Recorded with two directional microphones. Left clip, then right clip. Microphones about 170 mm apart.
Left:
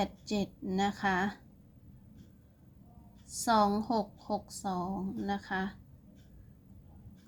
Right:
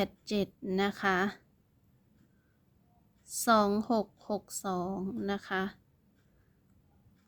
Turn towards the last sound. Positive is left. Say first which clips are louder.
# right 1 dB
turn(degrees=-45)  # may be behind; listen again after turning